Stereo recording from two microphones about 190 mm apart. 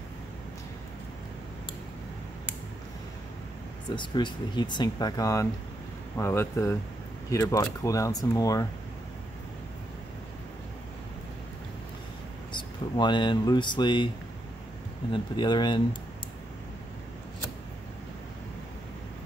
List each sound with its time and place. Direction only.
3.9 s speech: 25° left (ahead or behind)
12.5 s speech: 25° left (ahead or behind)
15.1 s speech: 25° left (ahead or behind)